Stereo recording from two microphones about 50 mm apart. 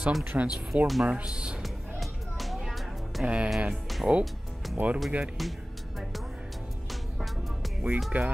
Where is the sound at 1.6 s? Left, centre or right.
Centre.